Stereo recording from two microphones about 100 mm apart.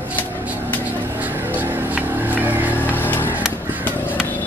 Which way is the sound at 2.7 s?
20° left (ahead or behind).